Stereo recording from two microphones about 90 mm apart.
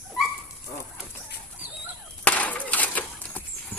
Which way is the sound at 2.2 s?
15° left (ahead or behind).